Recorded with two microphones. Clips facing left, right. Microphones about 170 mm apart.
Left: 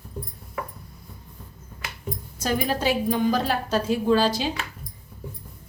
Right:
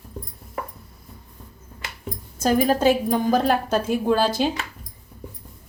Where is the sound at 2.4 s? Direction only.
45° right (ahead or behind).